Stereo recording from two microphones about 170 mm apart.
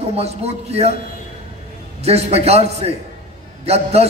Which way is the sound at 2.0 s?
35° right (ahead or behind).